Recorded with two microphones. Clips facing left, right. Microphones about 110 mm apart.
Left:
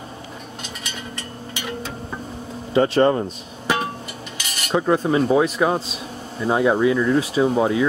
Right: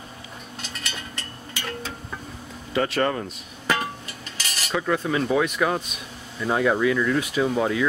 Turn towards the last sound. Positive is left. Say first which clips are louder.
# left 4 dB
turn(degrees=25)  # may be behind; listen again after turning